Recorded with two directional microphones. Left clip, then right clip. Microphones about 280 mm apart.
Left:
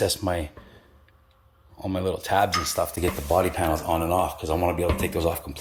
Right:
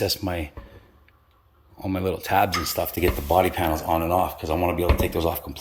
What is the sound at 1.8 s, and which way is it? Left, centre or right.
Speech, centre.